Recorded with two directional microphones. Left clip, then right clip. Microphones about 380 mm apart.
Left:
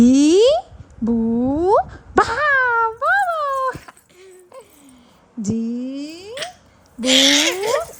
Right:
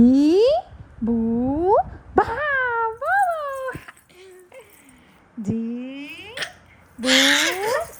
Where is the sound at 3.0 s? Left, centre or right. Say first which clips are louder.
Left 3 dB; centre.